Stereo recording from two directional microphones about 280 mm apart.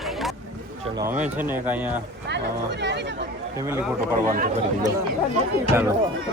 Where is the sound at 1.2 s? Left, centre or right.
Centre.